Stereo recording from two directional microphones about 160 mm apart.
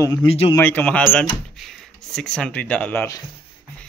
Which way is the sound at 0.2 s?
30° left (ahead or behind).